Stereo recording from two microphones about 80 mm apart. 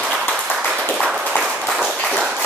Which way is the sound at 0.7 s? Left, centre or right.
Centre.